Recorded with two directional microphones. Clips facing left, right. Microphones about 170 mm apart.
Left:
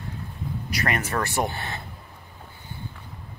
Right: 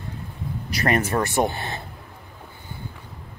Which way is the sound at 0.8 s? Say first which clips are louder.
Right 5 dB; 30° right (ahead or behind).